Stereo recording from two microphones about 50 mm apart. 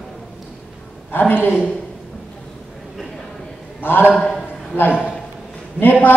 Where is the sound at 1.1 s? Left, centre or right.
Left.